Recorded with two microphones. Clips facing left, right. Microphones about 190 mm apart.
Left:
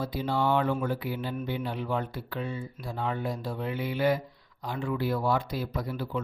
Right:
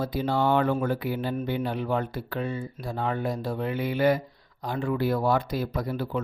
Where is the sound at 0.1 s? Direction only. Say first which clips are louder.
Right 2 dB; 50° right (ahead or behind).